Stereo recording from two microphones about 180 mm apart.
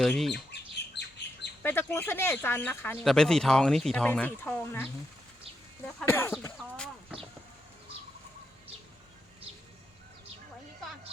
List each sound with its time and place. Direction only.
0.0 s speech: centre (ahead or behind)
0.5 s bird: 70° left (ahead or behind)
1.6 s speech: 10° left (ahead or behind)
6.0 s speech: 10° left (ahead or behind)